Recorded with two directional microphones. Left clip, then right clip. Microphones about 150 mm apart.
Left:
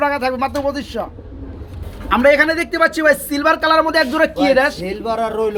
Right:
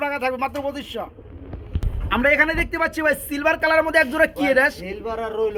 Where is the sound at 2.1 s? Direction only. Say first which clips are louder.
Left 5 dB; 20° right (ahead or behind).